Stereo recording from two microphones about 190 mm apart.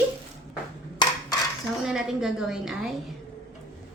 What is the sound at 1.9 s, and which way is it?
A woman's voice, centre (ahead or behind).